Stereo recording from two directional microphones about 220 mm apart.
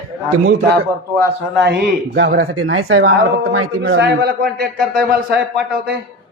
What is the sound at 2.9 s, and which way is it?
Speech, 55° right (ahead or behind).